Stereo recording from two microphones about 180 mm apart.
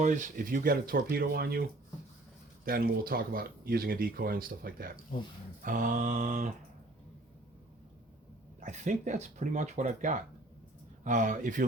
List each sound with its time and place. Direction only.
0.0 s speech: 45° right (ahead or behind)
2.6 s speech: 55° right (ahead or behind)
8.6 s speech: 40° right (ahead or behind)